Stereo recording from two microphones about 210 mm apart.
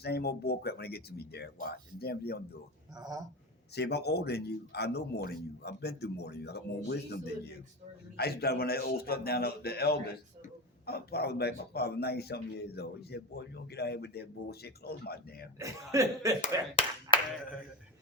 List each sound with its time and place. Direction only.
0.0 s a man's voice: 50° left (ahead or behind)
2.9 s speech: 20° right (ahead or behind)
3.8 s a man's voice: 50° left (ahead or behind)
15.5 s speech: 15° right (ahead or behind)